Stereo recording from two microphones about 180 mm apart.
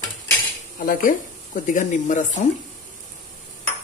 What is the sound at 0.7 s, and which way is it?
Speech, 50° left (ahead or behind).